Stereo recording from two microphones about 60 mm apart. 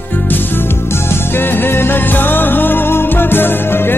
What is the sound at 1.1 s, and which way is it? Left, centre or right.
Music, left.